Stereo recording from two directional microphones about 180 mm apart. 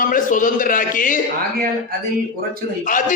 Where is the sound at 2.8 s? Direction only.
45° left (ahead or behind).